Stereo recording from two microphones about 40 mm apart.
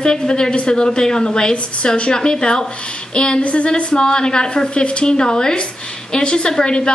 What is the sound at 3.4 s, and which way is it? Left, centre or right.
A woman's voice, left.